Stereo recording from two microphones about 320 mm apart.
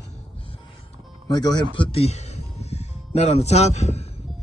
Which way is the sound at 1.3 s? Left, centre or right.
Centre.